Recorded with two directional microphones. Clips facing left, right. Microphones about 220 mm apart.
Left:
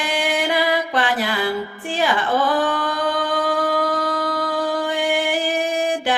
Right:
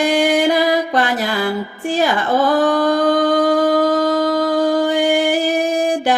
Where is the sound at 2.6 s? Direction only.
40° right (ahead or behind).